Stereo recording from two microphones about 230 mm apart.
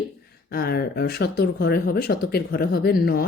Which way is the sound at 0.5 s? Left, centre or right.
Left.